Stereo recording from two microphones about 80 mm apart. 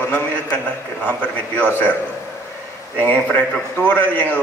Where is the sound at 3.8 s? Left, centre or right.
Centre.